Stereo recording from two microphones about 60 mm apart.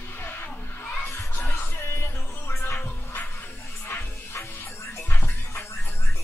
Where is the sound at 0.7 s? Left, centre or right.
Left.